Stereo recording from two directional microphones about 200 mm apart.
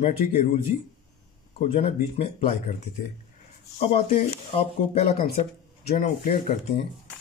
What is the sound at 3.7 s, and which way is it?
Speech, 30° left (ahead or behind).